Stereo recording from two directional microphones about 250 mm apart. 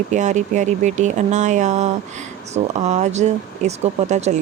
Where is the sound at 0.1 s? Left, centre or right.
Right.